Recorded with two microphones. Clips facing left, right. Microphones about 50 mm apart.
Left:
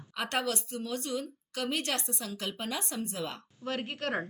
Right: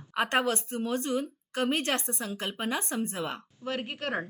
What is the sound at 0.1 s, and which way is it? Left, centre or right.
A woman's voice, right.